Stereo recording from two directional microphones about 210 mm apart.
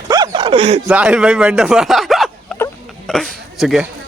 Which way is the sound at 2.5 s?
5° left (ahead or behind).